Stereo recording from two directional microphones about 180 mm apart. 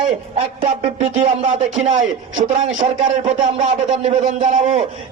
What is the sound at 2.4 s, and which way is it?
Speech, 40° right (ahead or behind).